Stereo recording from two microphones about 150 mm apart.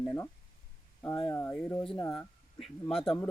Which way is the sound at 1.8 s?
35° left (ahead or behind).